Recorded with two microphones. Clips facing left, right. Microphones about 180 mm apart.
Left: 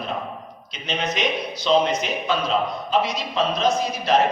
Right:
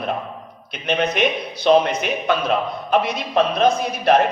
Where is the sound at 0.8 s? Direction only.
60° right (ahead or behind).